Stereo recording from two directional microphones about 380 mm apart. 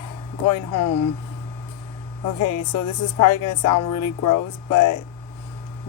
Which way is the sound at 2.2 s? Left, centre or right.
Left.